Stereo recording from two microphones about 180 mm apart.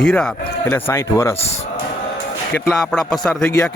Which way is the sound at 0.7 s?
15° left (ahead or behind).